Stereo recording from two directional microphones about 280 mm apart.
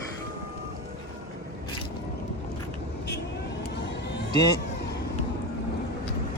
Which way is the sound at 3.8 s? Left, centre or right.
Left.